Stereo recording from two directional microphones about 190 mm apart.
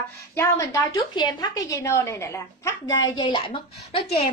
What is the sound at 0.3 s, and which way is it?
A woman's voice, 15° left (ahead or behind).